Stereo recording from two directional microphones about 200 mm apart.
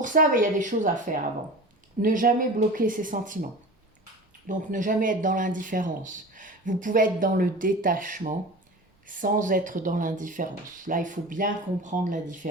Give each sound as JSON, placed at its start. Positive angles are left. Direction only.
{"t": 0.0, "sound": "speech", "side_deg": -40}
{"t": 4.4, "sound": "speech", "side_deg": -40}